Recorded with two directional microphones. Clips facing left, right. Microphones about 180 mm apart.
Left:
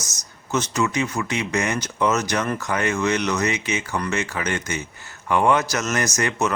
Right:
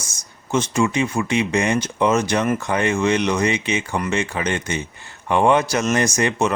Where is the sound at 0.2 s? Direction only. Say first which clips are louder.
Right 3 dB; 30° right (ahead or behind).